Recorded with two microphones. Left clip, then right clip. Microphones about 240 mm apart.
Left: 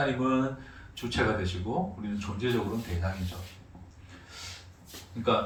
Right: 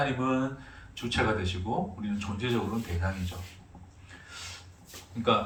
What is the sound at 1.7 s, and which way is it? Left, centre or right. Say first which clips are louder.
Speech: even; centre.